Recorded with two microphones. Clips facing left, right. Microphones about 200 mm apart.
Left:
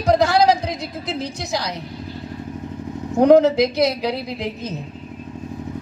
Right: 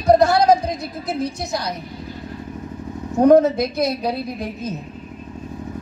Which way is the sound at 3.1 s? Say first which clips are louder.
Even; 80° left.